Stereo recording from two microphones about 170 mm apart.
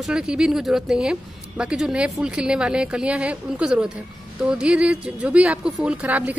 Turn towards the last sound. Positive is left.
turn(degrees=-10)  # may be behind; listen again after turning